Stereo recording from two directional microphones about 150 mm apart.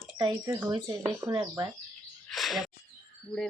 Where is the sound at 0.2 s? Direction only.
25° right (ahead or behind).